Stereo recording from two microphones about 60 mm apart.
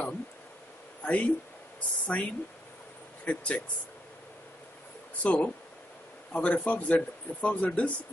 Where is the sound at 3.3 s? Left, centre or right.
Left.